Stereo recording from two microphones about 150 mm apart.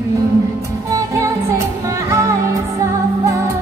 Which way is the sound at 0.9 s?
20° right (ahead or behind).